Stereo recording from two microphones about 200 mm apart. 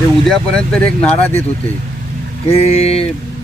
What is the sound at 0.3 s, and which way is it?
Speech, 5° left (ahead or behind).